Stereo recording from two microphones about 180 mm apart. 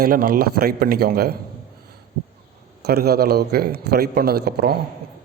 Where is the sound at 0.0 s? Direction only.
55° right (ahead or behind).